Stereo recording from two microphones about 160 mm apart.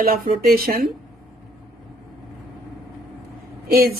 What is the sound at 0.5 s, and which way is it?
Speech, 65° right (ahead or behind).